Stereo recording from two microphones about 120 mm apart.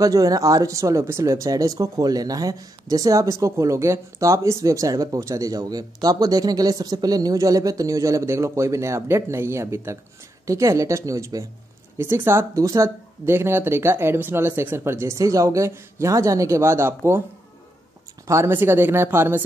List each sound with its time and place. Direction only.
0.0 s speech: 30° right (ahead or behind)
18.2 s speech: 25° right (ahead or behind)